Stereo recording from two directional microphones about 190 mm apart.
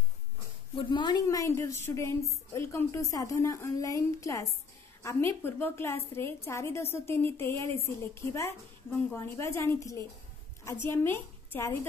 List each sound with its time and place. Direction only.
0.7 s a woman's voice: 25° left (ahead or behind)